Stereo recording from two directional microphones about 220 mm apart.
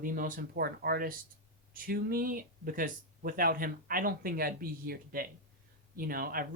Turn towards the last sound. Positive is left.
turn(degrees=-40)  # may be behind; listen again after turning